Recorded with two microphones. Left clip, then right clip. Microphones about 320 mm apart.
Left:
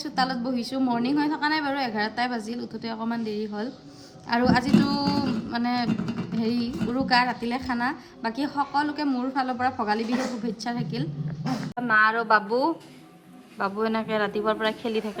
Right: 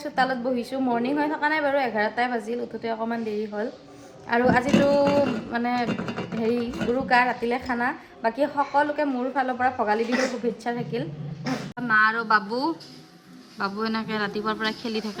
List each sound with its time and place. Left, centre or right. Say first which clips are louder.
0.0 s a woman's voice: right 2 dB; centre